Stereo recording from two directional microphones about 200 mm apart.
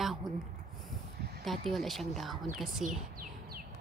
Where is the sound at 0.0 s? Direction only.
Centre (ahead or behind).